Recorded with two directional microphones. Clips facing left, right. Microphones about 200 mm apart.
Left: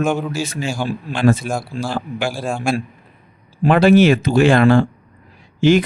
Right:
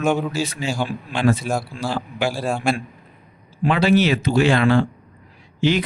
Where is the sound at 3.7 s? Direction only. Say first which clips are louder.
Left 6 dB; 50° left (ahead or behind).